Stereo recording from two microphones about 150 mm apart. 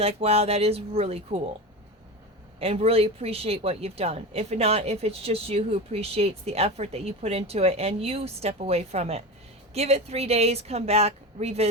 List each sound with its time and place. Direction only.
0.0 s speech: 40° right (ahead or behind)
2.6 s speech: 40° right (ahead or behind)